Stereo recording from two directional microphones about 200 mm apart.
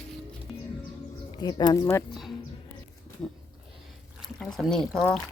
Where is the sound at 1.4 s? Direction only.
20° left (ahead or behind).